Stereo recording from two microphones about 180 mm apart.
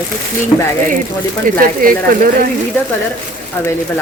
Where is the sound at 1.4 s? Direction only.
50° right (ahead or behind).